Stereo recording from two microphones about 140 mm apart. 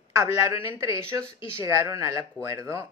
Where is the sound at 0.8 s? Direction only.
25° right (ahead or behind).